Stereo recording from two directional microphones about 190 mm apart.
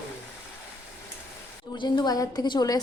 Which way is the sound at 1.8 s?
20° left (ahead or behind).